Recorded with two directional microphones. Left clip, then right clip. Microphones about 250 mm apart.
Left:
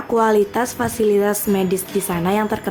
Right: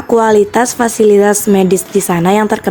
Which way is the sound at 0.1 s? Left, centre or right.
Right.